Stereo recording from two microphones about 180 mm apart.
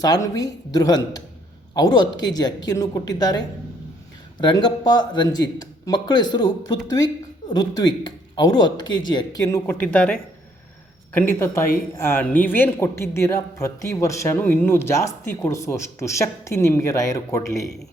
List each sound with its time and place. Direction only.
0.0 s a woman's voice: 20° left (ahead or behind)